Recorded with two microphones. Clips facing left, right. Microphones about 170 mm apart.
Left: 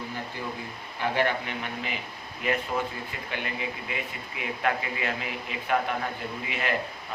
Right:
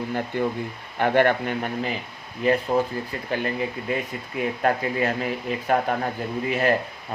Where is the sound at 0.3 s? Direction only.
55° right (ahead or behind).